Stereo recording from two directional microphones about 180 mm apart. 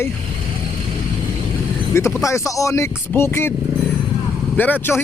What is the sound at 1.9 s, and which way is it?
Speech, 15° left (ahead or behind).